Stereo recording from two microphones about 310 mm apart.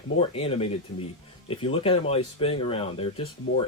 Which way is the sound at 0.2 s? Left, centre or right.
Centre.